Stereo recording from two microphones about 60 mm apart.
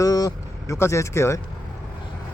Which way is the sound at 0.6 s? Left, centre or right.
Left.